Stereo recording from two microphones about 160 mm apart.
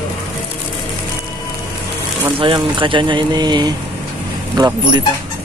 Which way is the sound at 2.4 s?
30° right (ahead or behind).